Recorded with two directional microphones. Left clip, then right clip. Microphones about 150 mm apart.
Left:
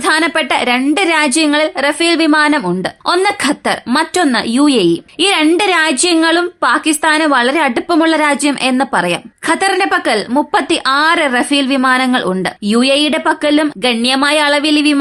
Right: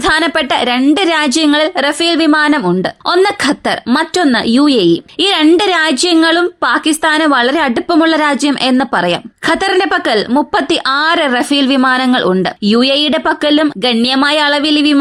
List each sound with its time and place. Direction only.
0.0 s a woman's voice: 35° right (ahead or behind)